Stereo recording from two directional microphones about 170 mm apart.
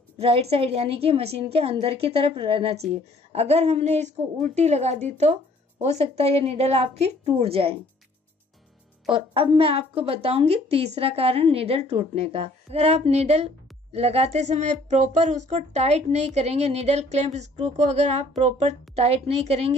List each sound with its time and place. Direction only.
0.2 s speech: 35° right (ahead or behind)
9.1 s speech: 30° right (ahead or behind)